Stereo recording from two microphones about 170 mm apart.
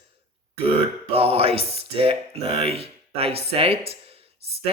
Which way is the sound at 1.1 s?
35° right (ahead or behind).